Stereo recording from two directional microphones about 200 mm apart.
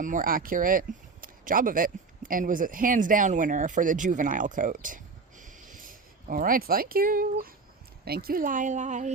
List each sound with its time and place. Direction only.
0.0 s speech: 40° right (ahead or behind)